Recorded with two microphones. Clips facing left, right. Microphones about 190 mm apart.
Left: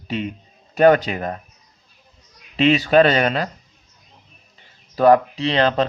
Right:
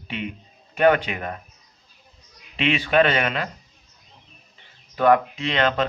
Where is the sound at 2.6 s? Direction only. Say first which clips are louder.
Left 5 dB; 40° left (ahead or behind).